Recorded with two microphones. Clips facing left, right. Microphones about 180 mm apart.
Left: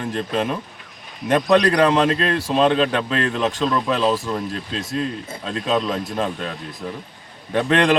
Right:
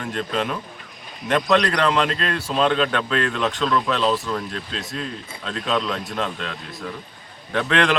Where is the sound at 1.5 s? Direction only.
30° left (ahead or behind).